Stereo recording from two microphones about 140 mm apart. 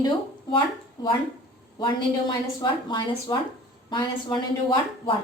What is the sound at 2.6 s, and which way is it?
Speech, 30° left (ahead or behind).